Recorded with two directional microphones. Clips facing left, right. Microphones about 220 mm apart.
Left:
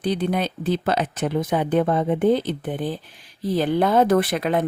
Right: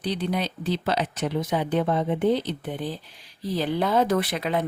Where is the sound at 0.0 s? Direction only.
50° left (ahead or behind).